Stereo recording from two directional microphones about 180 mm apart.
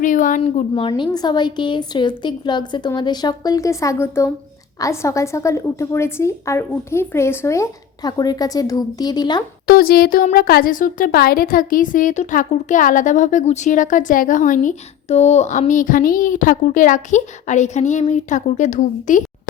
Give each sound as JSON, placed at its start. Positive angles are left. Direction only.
{"t": 0.0, "sound": "speech", "side_deg": 45}
{"t": 0.7, "sound": "a woman's voice", "side_deg": 25}
{"t": 9.6, "sound": "speech", "side_deg": 55}